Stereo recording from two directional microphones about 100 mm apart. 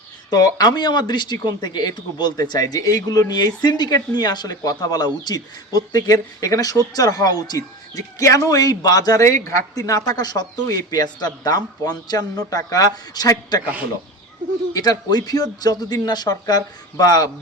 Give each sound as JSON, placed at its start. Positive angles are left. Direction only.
{"t": 0.3, "sound": "speech", "side_deg": 40}
{"t": 14.7, "sound": "speech", "side_deg": 40}